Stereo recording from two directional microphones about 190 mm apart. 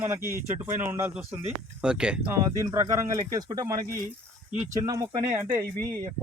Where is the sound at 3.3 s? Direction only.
20° right (ahead or behind).